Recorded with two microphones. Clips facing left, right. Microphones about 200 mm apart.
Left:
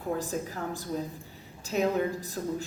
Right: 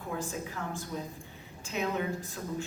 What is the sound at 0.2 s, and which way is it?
A woman's voice, 35° left (ahead or behind).